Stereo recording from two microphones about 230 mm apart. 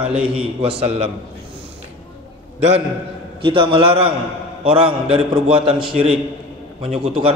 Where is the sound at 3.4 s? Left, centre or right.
Right.